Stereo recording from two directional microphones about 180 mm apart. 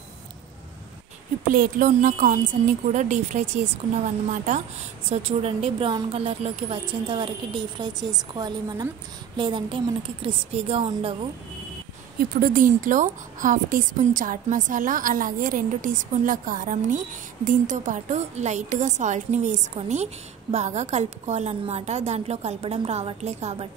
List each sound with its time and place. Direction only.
1.5 s a woman's voice: 50° right (ahead or behind); by 11.1 s 30° right (ahead or behind)
12.2 s a woman's voice: 50° right (ahead or behind); by 23.7 s 35° right (ahead or behind)